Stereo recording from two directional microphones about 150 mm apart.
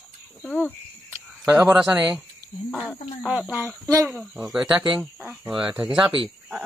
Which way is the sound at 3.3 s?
10° right (ahead or behind).